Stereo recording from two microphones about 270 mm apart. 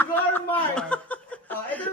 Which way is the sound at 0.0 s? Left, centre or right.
Centre.